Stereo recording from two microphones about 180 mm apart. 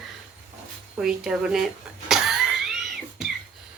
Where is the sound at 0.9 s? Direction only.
5° right (ahead or behind).